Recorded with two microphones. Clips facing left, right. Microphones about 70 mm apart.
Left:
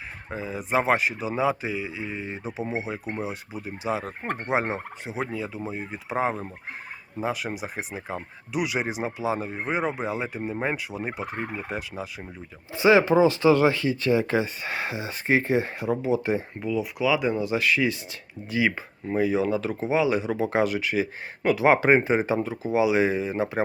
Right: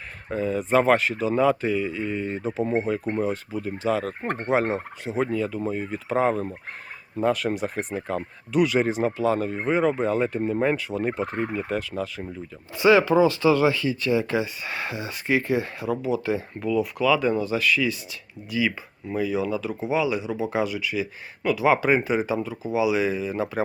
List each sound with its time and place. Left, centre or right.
0.3 s speech: centre
12.7 s speech: left
16.6 s speech: centre
17.5 s speech: left